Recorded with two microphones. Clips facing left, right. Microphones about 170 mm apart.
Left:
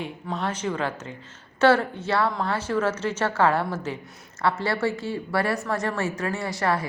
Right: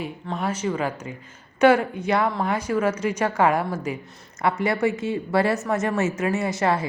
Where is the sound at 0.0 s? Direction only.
5° right (ahead or behind).